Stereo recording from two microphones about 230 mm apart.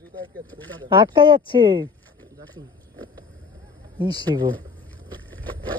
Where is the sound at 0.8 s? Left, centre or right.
Centre.